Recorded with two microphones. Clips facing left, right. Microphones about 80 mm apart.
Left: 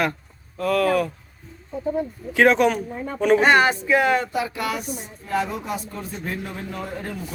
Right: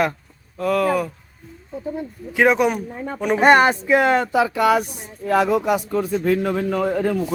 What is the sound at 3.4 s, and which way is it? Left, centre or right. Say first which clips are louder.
Speech: right 3 dB; right.